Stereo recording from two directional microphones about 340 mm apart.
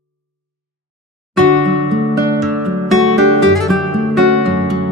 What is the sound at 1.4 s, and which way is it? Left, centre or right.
Music, right.